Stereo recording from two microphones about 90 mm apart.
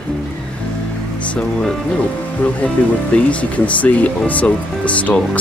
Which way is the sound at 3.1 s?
15° left (ahead or behind).